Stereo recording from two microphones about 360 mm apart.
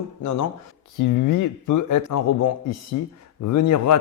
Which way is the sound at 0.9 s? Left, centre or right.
Left.